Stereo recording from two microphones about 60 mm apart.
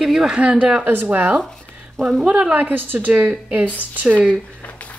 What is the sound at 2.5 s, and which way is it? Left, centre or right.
Speech, right.